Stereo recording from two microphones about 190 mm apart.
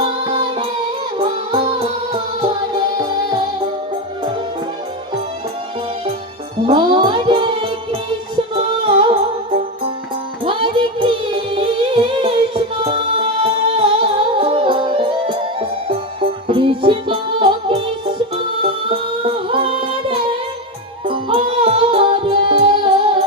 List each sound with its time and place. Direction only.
0.3 s music: 25° right (ahead or behind)
6.7 s music: 25° right (ahead or behind)
8.8 s music: 25° right (ahead or behind)
10.4 s music: 25° right (ahead or behind)
18.9 s music: 25° right (ahead or behind)